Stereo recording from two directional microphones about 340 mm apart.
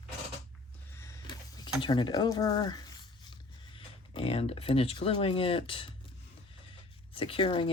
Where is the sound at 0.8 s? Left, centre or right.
Centre.